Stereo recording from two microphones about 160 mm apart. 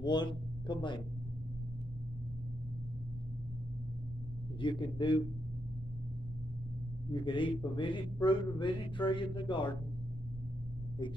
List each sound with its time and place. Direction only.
0.0 s speech: 30° left (ahead or behind)
4.6 s speech: 30° left (ahead or behind)
7.1 s speech: 30° left (ahead or behind)